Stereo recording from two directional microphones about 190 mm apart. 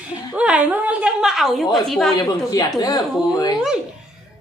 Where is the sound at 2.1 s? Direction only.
20° left (ahead or behind).